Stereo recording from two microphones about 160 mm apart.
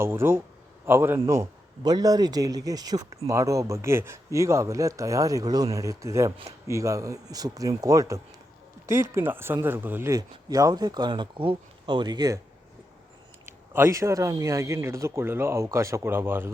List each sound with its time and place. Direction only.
0.0 s speech: 15° right (ahead or behind)
13.4 s speech: 15° right (ahead or behind)